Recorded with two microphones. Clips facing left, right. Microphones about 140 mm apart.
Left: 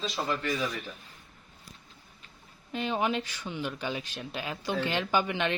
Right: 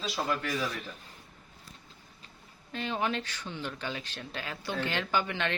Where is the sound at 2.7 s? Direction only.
15° left (ahead or behind).